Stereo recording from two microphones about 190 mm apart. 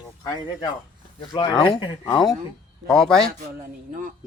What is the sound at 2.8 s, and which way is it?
Speech, 5° left (ahead or behind).